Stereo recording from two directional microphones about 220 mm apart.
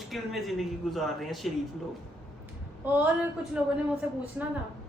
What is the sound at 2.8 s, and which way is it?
A woman's voice, 5° right (ahead or behind).